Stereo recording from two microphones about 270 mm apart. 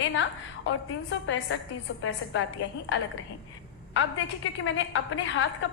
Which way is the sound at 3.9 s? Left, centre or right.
Left.